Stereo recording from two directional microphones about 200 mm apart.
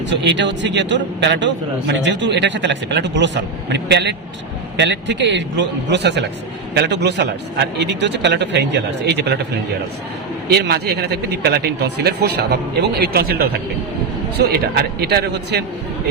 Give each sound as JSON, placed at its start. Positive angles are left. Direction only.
{"t": 0.1, "sound": "a man's voice", "side_deg": -65}
{"t": 10.5, "sound": "a man's voice", "side_deg": -55}
{"t": 14.3, "sound": "a man's voice", "side_deg": -55}